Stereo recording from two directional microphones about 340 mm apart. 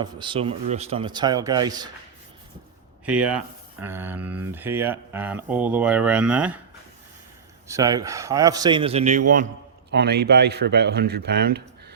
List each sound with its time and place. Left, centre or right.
0.0 s a man's voice: centre
3.1 s speech: centre
7.7 s a man's voice: centre; by 11.6 s right